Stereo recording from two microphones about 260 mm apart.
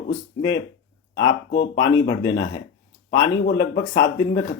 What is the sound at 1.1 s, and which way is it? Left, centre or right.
Speech, left.